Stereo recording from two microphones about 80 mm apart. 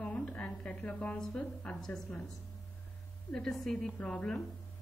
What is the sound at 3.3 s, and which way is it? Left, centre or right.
Speech, centre.